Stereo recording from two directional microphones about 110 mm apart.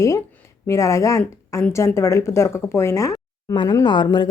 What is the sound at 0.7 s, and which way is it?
Speech, 30° left (ahead or behind).